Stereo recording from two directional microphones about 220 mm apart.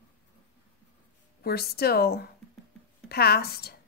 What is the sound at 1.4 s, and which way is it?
A woman's voice, 45° left (ahead or behind).